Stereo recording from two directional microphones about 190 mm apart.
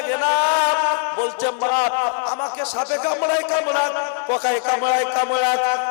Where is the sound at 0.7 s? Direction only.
25° left (ahead or behind).